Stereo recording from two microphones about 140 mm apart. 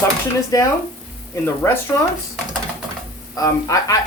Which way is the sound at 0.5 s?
25° left (ahead or behind).